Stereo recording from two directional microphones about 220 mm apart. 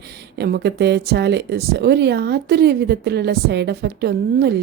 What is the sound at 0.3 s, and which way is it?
Speech, 45° right (ahead or behind).